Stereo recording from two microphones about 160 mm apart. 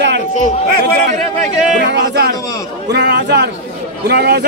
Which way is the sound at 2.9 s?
90° right.